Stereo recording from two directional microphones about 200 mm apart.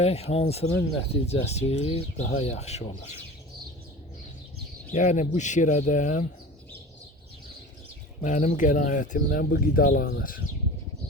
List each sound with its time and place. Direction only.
0.0 s speech: 30° left (ahead or behind)
4.9 s speech: 35° left (ahead or behind)
8.2 s speech: 40° left (ahead or behind)